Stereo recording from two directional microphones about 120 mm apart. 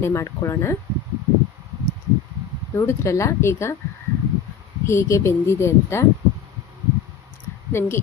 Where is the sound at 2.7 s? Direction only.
25° left (ahead or behind).